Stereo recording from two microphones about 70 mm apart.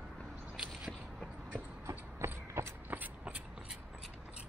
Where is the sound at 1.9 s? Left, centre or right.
Right.